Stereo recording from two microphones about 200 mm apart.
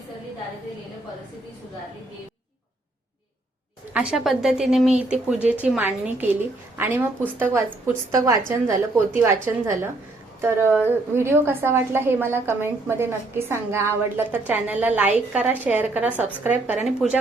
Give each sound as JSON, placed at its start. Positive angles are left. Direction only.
{"t": 3.9, "sound": "a woman's voice", "side_deg": -5}